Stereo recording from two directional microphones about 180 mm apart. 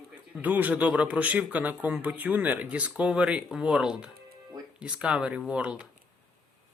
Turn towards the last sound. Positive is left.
turn(degrees=-5)  # may be behind; listen again after turning